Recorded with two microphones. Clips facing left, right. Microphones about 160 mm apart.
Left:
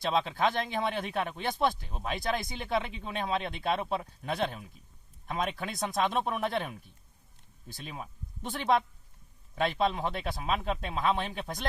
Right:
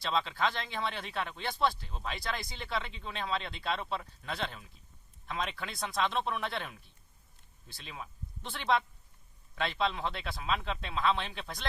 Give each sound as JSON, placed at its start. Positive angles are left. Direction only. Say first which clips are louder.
{"t": 0.0, "sound": "speech", "louder": "left 4 dB", "side_deg": 50}